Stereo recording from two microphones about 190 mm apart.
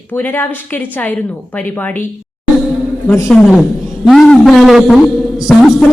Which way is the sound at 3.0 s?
10° left (ahead or behind).